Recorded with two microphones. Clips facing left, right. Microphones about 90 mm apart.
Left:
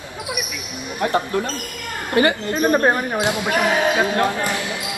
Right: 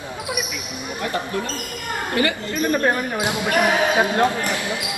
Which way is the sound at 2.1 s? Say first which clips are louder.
Left 5 dB; 25° left (ahead or behind).